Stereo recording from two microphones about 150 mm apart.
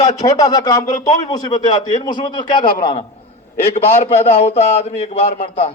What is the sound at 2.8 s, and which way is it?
Speech, 30° left (ahead or behind).